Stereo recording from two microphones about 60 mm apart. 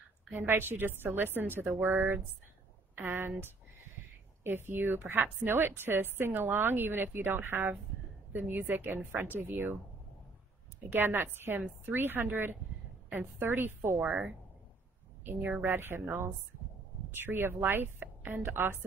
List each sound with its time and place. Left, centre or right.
0.4 s a woman's voice: right
3.0 s a woman's voice: right
10.9 s a woman's voice: right
14.0 s speech: centre
15.6 s a woman's voice: right